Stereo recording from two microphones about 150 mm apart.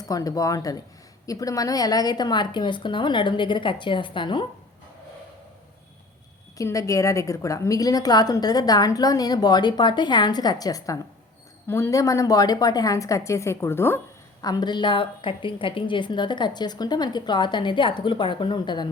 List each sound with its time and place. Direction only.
0.0 s a woman's voice: 25° left (ahead or behind)
6.6 s a woman's voice: 20° left (ahead or behind)
14.4 s a woman's voice: 25° left (ahead or behind)